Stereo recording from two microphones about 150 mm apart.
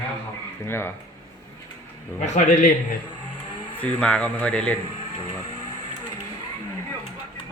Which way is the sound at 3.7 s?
10° left (ahead or behind).